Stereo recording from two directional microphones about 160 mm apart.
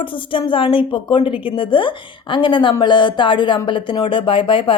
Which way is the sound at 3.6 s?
30° left (ahead or behind).